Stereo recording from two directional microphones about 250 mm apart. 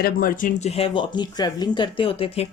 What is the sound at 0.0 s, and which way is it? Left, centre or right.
Speech, left.